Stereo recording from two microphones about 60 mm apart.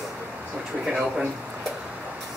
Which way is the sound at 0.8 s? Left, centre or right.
Centre.